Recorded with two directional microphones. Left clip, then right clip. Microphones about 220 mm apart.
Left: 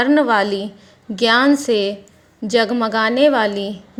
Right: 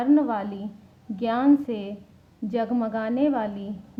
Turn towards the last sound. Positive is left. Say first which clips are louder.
# left 11 dB
turn(degrees=25)  # may be behind; listen again after turning